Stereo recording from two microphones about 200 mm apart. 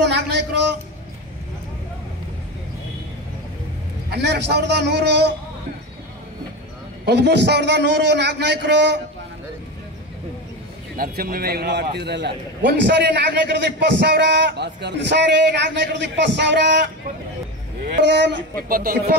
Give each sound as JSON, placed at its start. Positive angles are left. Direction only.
{"t": 0.0, "sound": "a man's voice", "side_deg": -60}
{"t": 4.1, "sound": "a man's voice", "side_deg": -60}
{"t": 7.1, "sound": "a man's voice", "side_deg": -60}
{"t": 11.0, "sound": "a man's voice", "side_deg": -45}
{"t": 17.8, "sound": "speech", "side_deg": -60}